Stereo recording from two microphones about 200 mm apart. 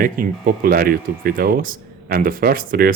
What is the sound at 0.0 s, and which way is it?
Speech, 45° right (ahead or behind).